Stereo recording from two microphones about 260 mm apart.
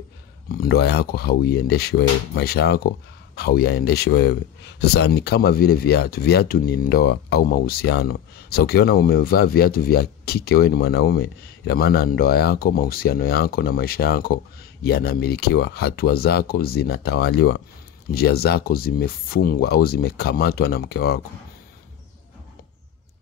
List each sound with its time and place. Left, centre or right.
0.5 s speech: left